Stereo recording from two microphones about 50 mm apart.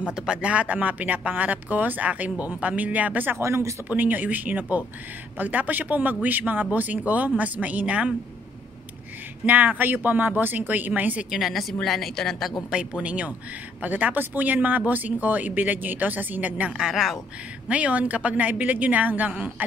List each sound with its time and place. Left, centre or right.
0.1 s speech: centre
3.3 s speech: right
3.9 s speech: right
9.5 s speech: right
11.2 s a woman's voice: centre
12.7 s speech: right
16.9 s speech: centre
17.6 s speech: right